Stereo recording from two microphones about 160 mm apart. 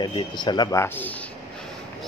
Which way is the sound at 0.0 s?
30° left (ahead or behind).